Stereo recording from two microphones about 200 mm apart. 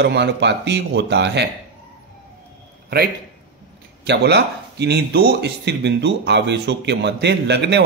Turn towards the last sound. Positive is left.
turn(degrees=-60)  # may be behind; listen again after turning